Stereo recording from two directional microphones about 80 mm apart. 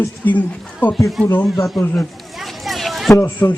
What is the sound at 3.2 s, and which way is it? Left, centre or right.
Speech, left.